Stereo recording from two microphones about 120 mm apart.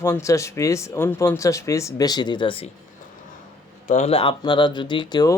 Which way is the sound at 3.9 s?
80° left.